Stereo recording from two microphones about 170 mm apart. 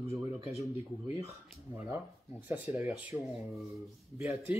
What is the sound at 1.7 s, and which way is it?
A man's voice, 15° right (ahead or behind).